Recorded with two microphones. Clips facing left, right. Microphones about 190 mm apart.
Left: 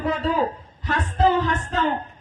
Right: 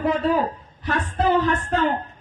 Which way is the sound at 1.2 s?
60° right (ahead or behind).